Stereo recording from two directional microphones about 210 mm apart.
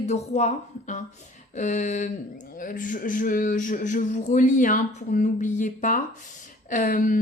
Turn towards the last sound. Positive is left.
turn(degrees=40)  # may be behind; listen again after turning